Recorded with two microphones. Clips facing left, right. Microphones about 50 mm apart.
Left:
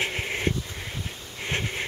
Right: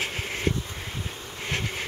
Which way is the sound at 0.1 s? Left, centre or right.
Left.